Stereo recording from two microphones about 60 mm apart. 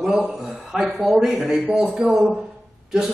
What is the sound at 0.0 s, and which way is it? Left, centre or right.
Speech, centre.